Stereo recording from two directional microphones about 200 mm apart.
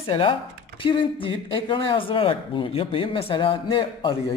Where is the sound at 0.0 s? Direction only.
25° left (ahead or behind).